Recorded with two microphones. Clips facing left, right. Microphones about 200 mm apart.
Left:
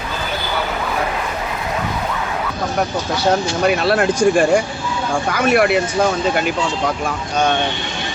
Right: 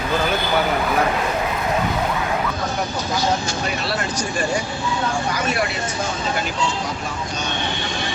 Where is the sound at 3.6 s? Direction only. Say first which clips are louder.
Left 9 dB; 55° left (ahead or behind).